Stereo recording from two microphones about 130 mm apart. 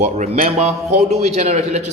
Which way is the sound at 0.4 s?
55° right (ahead or behind).